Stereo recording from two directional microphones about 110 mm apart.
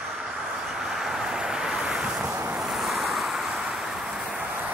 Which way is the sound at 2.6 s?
Centre (ahead or behind).